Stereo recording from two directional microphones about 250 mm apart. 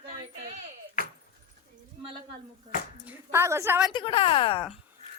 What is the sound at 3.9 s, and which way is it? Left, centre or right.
Speech, left.